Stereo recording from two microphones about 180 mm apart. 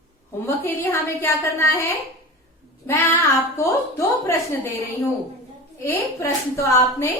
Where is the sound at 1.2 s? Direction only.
15° left (ahead or behind).